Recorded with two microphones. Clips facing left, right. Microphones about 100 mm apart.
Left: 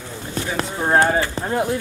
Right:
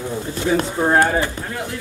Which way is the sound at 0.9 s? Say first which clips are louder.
Left 2 dB; 25° left (ahead or behind).